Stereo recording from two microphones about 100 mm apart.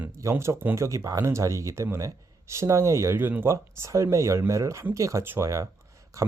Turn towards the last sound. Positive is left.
turn(degrees=-30)  # may be behind; listen again after turning